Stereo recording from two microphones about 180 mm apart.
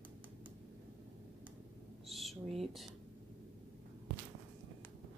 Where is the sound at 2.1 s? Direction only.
Centre (ahead or behind).